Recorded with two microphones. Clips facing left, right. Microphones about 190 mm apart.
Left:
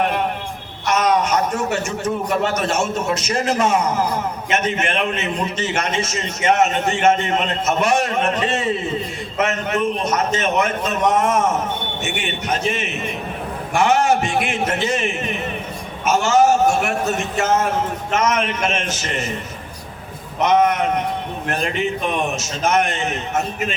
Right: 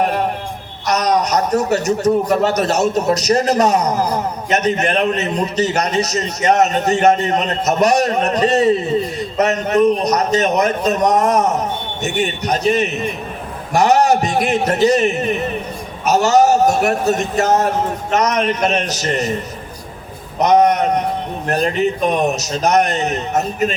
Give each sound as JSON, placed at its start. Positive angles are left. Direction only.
{"t": 0.0, "sound": "a sound", "side_deg": -40}
{"t": 0.9, "sound": "a man's voice", "side_deg": -40}
{"t": 20.4, "sound": "a man's voice", "side_deg": -40}